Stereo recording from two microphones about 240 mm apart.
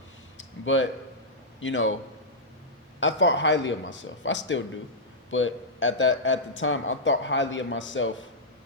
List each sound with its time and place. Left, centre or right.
0.6 s a man's voice: left
3.0 s a man's voice: left